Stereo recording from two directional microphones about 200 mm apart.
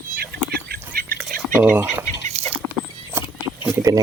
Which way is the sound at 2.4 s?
30° right (ahead or behind).